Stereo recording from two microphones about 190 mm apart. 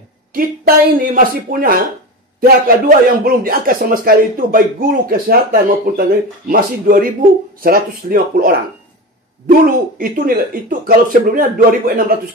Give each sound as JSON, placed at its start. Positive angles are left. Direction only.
{"t": 0.3, "sound": "a man's voice", "side_deg": -50}